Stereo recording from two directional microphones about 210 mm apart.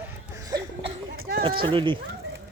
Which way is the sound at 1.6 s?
25° right (ahead or behind).